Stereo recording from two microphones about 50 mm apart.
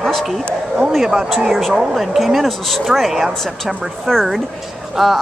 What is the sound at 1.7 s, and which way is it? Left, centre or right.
Speech, centre.